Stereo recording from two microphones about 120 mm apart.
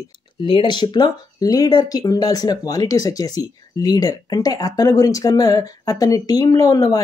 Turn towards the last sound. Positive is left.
turn(degrees=30)  # may be behind; listen again after turning